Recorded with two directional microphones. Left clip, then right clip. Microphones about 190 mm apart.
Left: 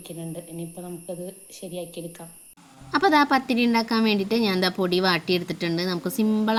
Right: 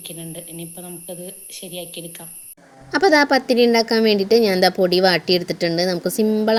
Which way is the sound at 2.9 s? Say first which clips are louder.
Right 4 dB; 15° right (ahead or behind).